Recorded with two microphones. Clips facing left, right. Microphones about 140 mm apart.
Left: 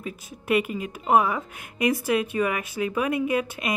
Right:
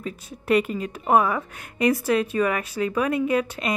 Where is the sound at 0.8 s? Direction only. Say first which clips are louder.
Left 1 dB; 15° left (ahead or behind).